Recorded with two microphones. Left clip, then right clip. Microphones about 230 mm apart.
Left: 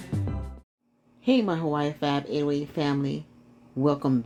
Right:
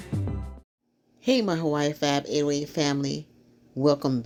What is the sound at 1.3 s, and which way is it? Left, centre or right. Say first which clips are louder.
Speech: right 1 dB; right.